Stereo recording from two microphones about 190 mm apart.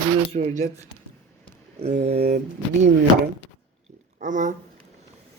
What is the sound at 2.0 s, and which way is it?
Speech, 35° right (ahead or behind).